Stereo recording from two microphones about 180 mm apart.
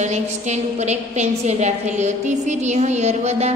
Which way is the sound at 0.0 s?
40° right (ahead or behind).